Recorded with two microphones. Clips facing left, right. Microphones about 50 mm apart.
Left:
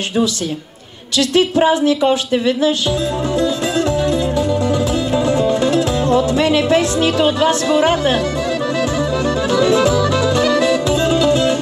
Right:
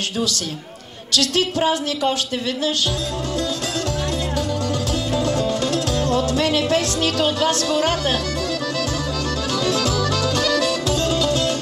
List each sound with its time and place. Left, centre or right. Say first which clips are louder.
1.1 s speech: left 6 dB; left
4.4 s music: left 7 dB; left
9.5 s music: left 8 dB; left